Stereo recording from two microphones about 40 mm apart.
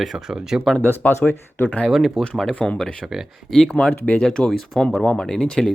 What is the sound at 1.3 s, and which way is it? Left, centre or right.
Speech, left.